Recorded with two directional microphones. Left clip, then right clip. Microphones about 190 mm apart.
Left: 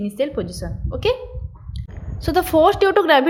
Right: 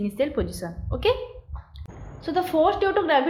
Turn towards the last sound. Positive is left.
turn(degrees=35)  # may be behind; listen again after turning